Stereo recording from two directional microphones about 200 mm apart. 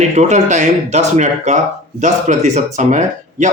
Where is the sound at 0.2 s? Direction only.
35° right (ahead or behind).